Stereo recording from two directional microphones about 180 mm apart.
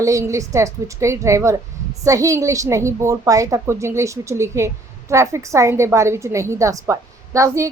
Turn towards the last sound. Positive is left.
turn(degrees=-15)  # may be behind; listen again after turning